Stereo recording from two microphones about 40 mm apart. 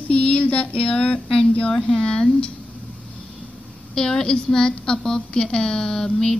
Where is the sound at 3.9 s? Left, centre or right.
Centre.